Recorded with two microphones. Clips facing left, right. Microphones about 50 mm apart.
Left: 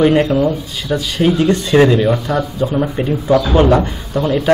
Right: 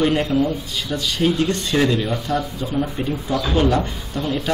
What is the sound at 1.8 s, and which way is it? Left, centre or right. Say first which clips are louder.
Speech: left 8 dB; left.